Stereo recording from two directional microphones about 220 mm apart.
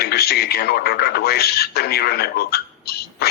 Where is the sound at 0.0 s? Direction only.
45° left (ahead or behind).